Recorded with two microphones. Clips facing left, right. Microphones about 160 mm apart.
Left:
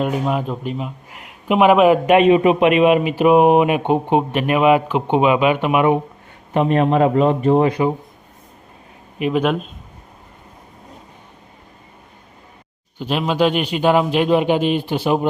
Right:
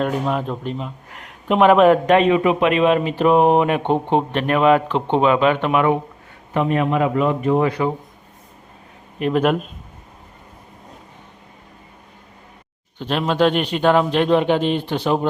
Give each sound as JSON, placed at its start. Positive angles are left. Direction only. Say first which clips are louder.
{"t": 0.0, "sound": "a man's voice", "louder": "left 1 dB", "side_deg": 5}
{"t": 6.7, "sound": "speech", "louder": "left 5 dB", "side_deg": 30}
{"t": 9.1, "sound": "speech", "louder": "even", "side_deg": 5}
{"t": 13.0, "sound": "speech", "louder": "even", "side_deg": 5}